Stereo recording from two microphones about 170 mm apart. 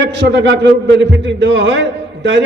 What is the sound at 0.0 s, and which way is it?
A man's voice, 90° right.